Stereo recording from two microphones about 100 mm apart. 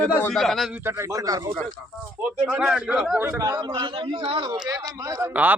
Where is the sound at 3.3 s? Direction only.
35° right (ahead or behind).